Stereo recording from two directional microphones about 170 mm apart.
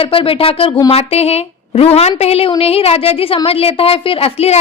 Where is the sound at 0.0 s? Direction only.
30° left (ahead or behind).